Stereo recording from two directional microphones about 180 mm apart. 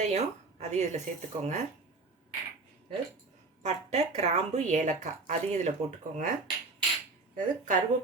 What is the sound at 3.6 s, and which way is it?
Speech, 40° right (ahead or behind).